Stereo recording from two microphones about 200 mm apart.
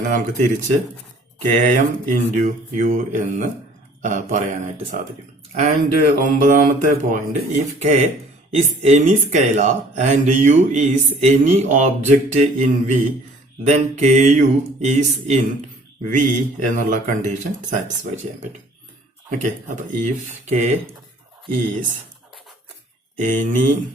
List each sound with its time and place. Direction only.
0.1 s speech: 40° right (ahead or behind)
5.5 s speech: 35° right (ahead or behind)
19.4 s speech: 40° right (ahead or behind)
23.1 s speech: 40° right (ahead or behind)